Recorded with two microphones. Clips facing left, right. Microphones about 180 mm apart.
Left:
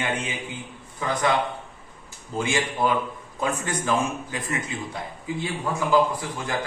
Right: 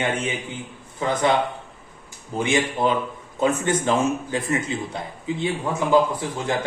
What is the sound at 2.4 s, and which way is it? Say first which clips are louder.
A man's voice: right 3 dB; 20° right (ahead or behind).